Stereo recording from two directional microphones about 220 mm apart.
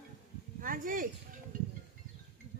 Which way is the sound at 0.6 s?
40° right (ahead or behind).